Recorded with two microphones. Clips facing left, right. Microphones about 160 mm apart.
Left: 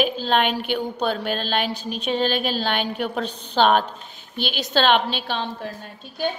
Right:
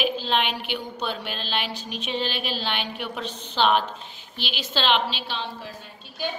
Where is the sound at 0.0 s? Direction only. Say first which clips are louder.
Left 4 dB; 45° left (ahead or behind).